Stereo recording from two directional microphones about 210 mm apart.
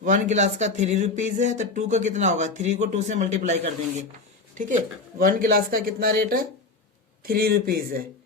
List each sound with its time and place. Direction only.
0.0 s speech: 35° right (ahead or behind)